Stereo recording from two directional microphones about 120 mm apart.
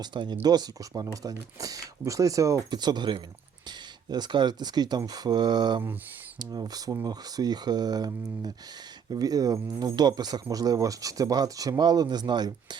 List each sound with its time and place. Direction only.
0.0 s speech: 40° right (ahead or behind)